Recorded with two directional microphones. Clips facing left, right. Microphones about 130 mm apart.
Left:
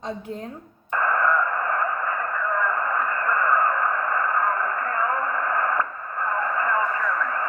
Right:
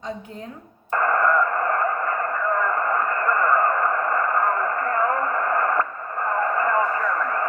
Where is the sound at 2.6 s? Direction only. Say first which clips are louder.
Right 1 dB; 40° right (ahead or behind).